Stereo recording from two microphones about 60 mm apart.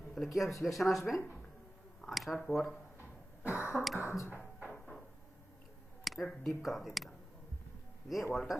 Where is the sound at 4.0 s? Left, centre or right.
Left.